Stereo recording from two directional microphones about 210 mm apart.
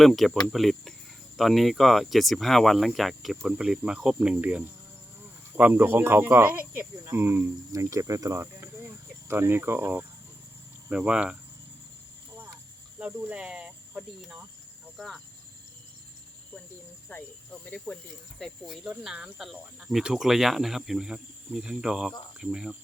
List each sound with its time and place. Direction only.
0.0 s speech: centre (ahead or behind)
13.0 s speech: 5° right (ahead or behind)
17.1 s speech: 10° left (ahead or behind)